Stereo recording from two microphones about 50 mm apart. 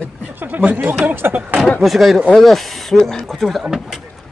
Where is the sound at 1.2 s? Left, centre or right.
Right.